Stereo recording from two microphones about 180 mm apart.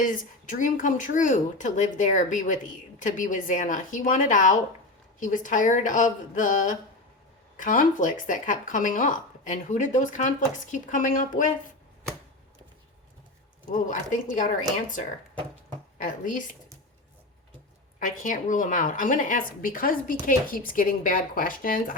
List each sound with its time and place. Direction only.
0.0 s speech: 45° left (ahead or behind)
13.7 s a woman's voice: 45° left (ahead or behind)
18.0 s speech: 45° left (ahead or behind)